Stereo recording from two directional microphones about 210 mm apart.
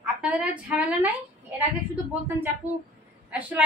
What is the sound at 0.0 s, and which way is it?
Speech, 5° right (ahead or behind).